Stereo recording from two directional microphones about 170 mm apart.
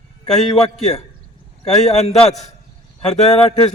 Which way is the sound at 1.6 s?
40° left (ahead or behind).